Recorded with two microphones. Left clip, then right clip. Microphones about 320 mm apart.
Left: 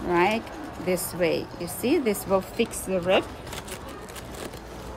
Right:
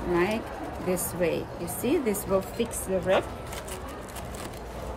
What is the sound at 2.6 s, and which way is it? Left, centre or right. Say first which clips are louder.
Speech: left 2 dB; centre.